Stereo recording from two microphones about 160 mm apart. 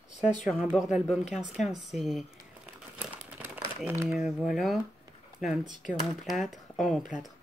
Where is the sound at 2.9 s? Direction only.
10° right (ahead or behind).